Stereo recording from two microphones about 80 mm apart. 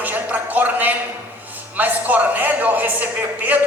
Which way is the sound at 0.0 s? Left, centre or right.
Right.